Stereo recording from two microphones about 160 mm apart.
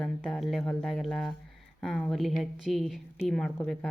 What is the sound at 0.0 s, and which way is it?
A woman's voice, centre (ahead or behind).